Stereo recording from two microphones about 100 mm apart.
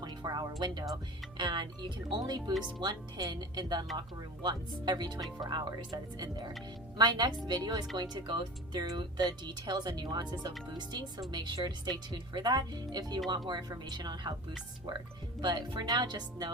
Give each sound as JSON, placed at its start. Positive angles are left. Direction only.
{"t": 0.0, "sound": "music", "side_deg": -45}
{"t": 0.6, "sound": "speech", "side_deg": -45}
{"t": 15.4, "sound": "speech", "side_deg": -50}